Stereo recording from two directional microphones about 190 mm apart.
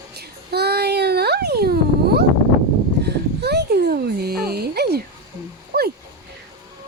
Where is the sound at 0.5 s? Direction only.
60° right (ahead or behind).